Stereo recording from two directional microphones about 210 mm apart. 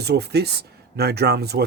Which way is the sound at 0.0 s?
50° right (ahead or behind).